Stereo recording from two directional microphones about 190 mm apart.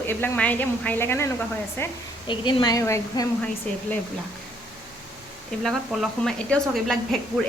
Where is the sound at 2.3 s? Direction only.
25° left (ahead or behind).